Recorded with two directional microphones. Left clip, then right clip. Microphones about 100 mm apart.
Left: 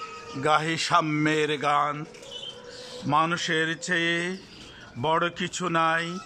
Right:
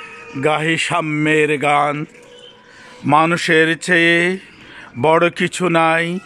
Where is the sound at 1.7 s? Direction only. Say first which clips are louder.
Right 9 dB; 40° right (ahead or behind).